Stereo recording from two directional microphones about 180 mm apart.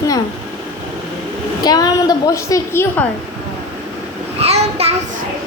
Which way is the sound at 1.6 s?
20° left (ahead or behind).